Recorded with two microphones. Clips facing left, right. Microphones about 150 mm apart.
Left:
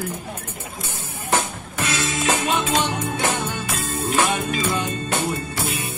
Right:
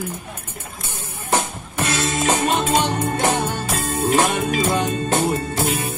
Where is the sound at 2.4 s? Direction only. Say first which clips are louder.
Right 3 dB; 45° right (ahead or behind).